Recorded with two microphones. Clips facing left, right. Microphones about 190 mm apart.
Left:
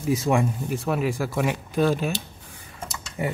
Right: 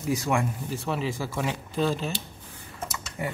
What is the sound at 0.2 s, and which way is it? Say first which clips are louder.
Speech: left 4 dB; 20° left (ahead or behind).